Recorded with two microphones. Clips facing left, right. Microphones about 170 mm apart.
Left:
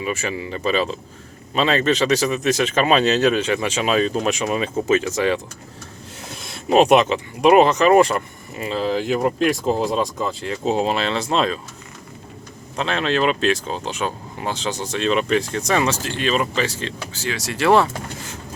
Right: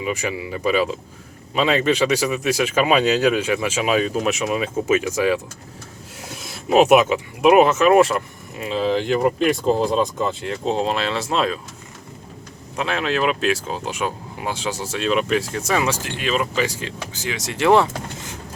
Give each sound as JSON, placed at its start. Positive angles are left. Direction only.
{"t": 0.0, "sound": "speech", "side_deg": -15}
{"t": 6.4, "sound": "speech", "side_deg": -5}
{"t": 12.7, "sound": "speech", "side_deg": -10}